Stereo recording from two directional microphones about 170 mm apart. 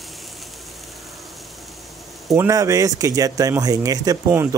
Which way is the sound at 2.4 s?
20° right (ahead or behind).